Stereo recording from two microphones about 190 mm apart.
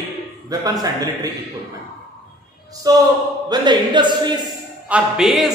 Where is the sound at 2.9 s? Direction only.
20° right (ahead or behind).